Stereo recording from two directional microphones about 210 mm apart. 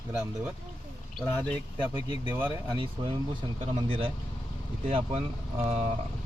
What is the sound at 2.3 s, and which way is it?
Speech, 10° right (ahead or behind).